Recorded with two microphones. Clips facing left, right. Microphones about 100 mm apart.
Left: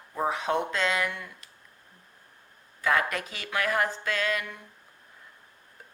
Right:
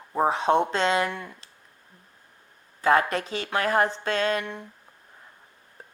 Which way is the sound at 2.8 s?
30° right (ahead or behind).